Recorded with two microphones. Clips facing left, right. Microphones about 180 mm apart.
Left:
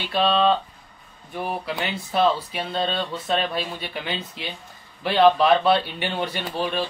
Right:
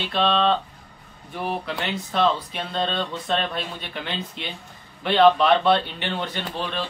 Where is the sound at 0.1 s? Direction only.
5° left (ahead or behind).